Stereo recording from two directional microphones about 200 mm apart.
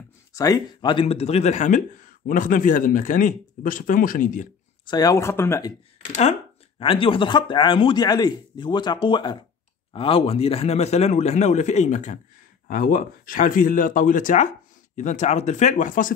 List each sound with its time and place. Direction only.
0.3 s speech: 15° left (ahead or behind); by 4.5 s 40° left (ahead or behind)
4.8 s speech: 20° left (ahead or behind)
6.8 s speech: 25° left (ahead or behind)